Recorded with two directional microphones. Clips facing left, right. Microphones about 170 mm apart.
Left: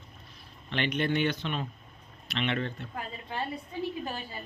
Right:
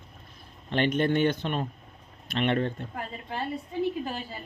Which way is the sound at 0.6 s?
45° right (ahead or behind).